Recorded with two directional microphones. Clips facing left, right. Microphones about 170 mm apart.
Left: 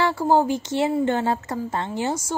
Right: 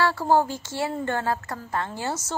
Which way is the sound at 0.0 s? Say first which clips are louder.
Left 2 dB; 15° left (ahead or behind).